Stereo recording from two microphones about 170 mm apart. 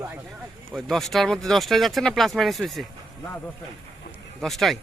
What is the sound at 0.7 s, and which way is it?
Speech, centre (ahead or behind).